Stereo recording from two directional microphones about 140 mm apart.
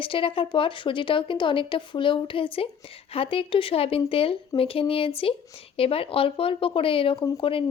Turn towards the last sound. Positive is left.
turn(degrees=40)  # may be behind; listen again after turning